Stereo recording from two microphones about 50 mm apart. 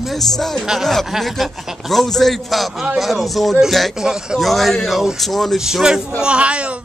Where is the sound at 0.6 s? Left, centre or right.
Centre.